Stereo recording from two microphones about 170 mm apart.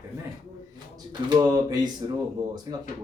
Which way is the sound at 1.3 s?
20° right (ahead or behind).